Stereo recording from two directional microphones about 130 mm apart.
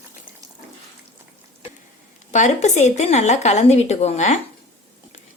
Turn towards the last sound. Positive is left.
turn(degrees=60)  # may be behind; listen again after turning